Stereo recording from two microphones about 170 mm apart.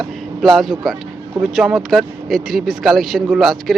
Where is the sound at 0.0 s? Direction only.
Centre (ahead or behind).